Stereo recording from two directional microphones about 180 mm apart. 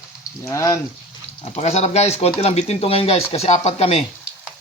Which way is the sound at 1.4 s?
40° left (ahead or behind).